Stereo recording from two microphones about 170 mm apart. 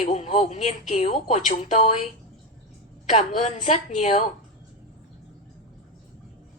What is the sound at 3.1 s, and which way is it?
A woman's voice, 40° left (ahead or behind).